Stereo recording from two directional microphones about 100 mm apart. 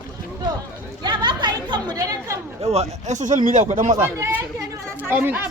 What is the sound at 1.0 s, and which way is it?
Speech, 50° right (ahead or behind).